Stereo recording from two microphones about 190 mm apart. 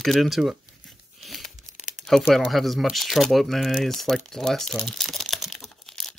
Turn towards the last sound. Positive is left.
turn(degrees=0)  # may be behind; listen again after turning